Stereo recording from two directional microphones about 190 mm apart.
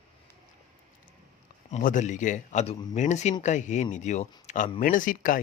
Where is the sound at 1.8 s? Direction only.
45° left (ahead or behind).